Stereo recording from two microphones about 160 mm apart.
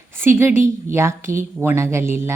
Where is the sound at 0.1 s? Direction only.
15° right (ahead or behind).